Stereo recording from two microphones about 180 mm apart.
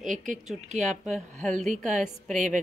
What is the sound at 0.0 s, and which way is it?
Speech, 45° right (ahead or behind).